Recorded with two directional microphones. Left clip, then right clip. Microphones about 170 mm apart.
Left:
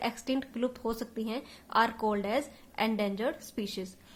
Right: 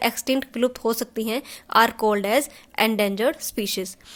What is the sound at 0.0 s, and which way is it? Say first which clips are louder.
A woman's voice: right 10 dB; 45° right (ahead or behind).